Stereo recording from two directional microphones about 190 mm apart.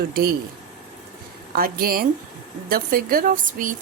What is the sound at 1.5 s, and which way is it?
A woman's voice, 50° right (ahead or behind).